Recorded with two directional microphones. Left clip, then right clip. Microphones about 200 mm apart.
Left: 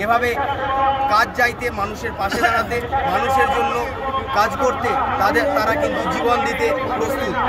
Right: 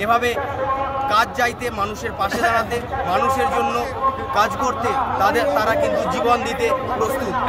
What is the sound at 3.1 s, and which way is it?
Speech, 5° left (ahead or behind).